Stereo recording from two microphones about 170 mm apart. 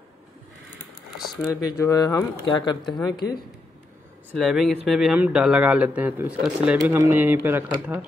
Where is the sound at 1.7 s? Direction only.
20° left (ahead or behind).